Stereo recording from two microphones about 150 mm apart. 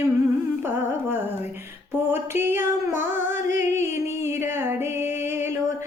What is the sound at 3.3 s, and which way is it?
Music, 15° right (ahead or behind).